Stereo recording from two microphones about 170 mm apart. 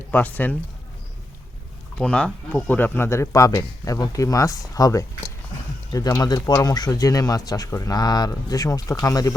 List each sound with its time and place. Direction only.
0.1 s speech: 10° left (ahead or behind)
2.0 s speech: 5° left (ahead or behind)